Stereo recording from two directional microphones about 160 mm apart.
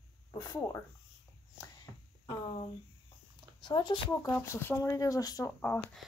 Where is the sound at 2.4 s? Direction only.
40° left (ahead or behind); by 5.8 s 15° left (ahead or behind).